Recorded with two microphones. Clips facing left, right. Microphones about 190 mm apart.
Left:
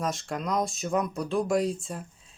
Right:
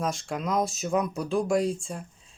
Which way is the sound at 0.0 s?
Centre (ahead or behind).